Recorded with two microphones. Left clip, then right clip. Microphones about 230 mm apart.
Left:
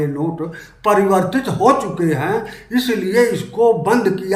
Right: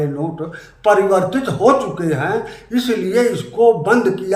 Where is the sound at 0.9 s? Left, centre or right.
Centre.